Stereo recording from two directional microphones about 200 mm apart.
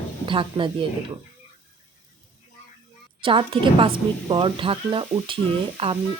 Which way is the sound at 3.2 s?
25° right (ahead or behind).